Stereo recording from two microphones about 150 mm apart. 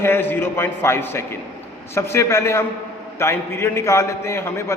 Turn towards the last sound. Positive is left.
turn(degrees=15)  # may be behind; listen again after turning